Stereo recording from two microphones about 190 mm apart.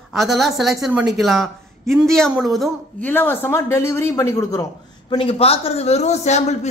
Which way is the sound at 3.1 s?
10° left (ahead or behind).